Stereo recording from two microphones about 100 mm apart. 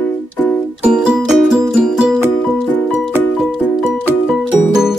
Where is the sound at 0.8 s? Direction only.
10° right (ahead or behind).